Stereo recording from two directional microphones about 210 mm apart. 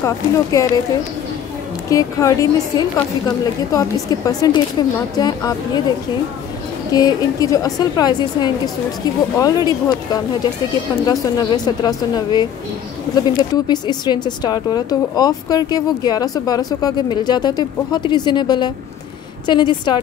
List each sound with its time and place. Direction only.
0.0 s a woman's voice: 15° left (ahead or behind)
1.9 s a woman's voice: 15° left (ahead or behind)
13.1 s speech: 20° left (ahead or behind)